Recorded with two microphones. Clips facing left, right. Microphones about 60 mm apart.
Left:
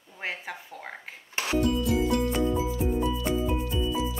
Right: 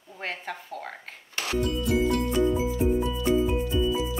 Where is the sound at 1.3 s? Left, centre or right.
Left.